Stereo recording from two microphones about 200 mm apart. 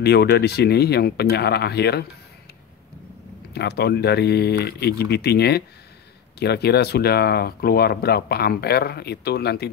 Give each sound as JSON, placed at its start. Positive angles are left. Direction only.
{"t": 0.0, "sound": "speech", "side_deg": 55}
{"t": 3.5, "sound": "speech", "side_deg": 55}